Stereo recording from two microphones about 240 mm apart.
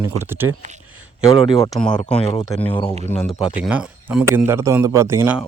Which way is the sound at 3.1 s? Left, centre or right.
Centre.